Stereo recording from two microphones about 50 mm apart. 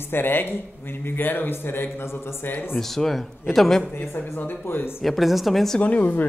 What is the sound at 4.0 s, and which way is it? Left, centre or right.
Speech, left.